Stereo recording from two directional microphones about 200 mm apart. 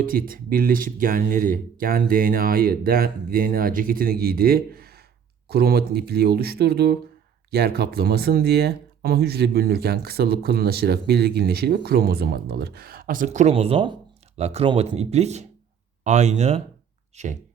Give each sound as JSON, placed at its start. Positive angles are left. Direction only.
{"t": 0.0, "sound": "speech", "side_deg": -45}